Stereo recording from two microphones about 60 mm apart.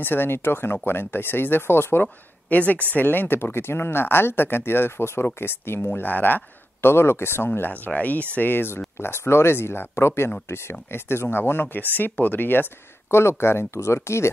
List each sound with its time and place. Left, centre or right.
0.0 s speech: left
2.5 s speech: left
7.7 s speech: left
13.1 s speech: left